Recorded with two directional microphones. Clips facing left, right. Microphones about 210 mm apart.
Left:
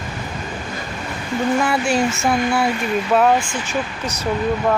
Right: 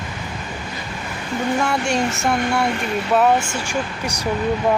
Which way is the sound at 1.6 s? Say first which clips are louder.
Left 2 dB; centre (ahead or behind).